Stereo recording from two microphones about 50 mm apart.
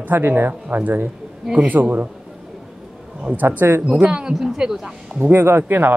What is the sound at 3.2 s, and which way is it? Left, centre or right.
Speech, right.